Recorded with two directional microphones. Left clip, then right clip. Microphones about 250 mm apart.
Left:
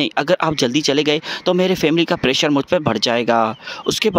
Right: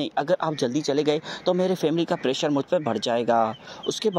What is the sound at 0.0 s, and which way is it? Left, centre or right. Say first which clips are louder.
Speech: left 7 dB; left.